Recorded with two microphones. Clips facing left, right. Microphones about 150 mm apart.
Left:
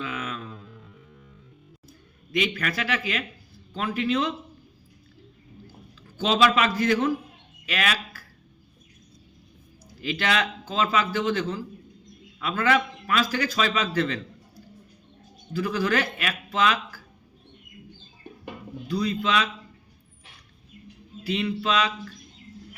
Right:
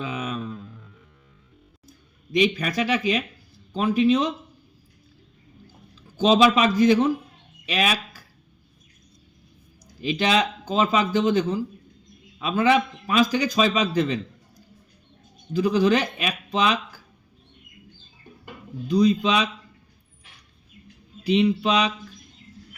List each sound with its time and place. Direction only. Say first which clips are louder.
0.0 s music: right 3 dB; 15° right (ahead or behind)
2.6 s a man's voice: right 4 dB; 15° right (ahead or behind)
6.1 s a man's voice: right 4 dB; 15° right (ahead or behind)
10.0 s a man's voice: right 4 dB; 20° right (ahead or behind)
15.5 s a man's voice: right 5 dB; 20° right (ahead or behind)
18.9 s a man's voice: right 6 dB; 20° right (ahead or behind)
21.2 s a man's voice: right 6 dB; 15° right (ahead or behind)